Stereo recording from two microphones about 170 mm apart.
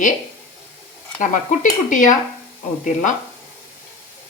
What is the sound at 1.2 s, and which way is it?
A woman's voice, 50° left (ahead or behind).